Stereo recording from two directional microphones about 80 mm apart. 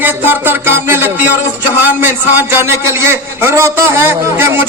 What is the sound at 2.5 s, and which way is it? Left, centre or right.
A man's voice, right.